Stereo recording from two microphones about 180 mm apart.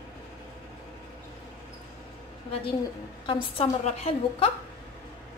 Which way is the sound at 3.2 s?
30° left (ahead or behind).